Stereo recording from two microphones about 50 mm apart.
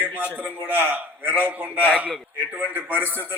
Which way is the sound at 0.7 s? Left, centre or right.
Right.